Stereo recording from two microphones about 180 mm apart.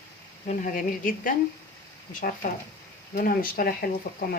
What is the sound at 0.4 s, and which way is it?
Speech, 45° left (ahead or behind).